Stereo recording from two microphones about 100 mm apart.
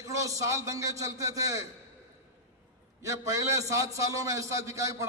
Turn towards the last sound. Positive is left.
turn(degrees=-30)  # may be behind; listen again after turning